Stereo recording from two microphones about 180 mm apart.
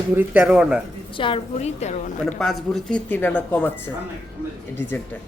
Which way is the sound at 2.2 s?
Centre (ahead or behind).